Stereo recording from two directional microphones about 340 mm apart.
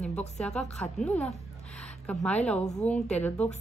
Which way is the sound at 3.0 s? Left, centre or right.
Centre.